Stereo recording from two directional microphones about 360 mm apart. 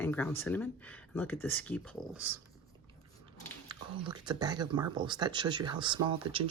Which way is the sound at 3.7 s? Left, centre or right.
Centre.